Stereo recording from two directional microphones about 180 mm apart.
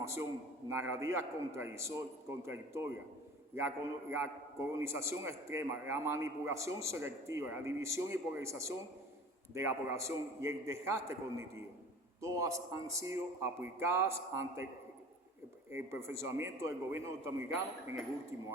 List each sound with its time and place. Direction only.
0.0 s a man's voice: 15° right (ahead or behind)
4.1 s a man's voice: 15° right (ahead or behind)
15.7 s a man's voice: 15° right (ahead or behind)